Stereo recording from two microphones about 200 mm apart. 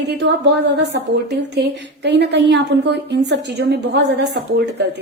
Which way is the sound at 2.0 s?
60° right (ahead or behind).